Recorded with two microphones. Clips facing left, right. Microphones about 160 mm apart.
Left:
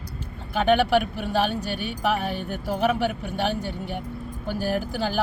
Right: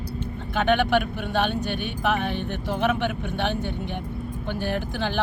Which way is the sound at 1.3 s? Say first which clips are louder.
Even; 35° left (ahead or behind).